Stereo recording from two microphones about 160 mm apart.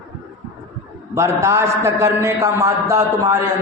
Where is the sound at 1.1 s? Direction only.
20° right (ahead or behind).